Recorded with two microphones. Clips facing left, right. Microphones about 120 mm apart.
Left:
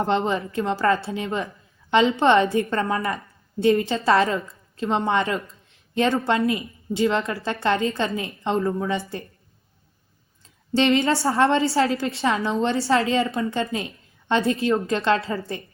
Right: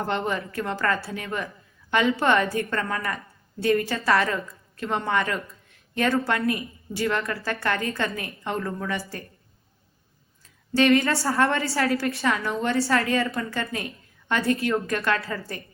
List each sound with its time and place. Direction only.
0.0 s a woman's voice: 20° left (ahead or behind)
10.8 s a woman's voice: 25° left (ahead or behind)